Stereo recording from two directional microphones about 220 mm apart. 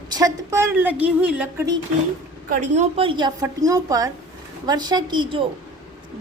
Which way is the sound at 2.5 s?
35° right (ahead or behind).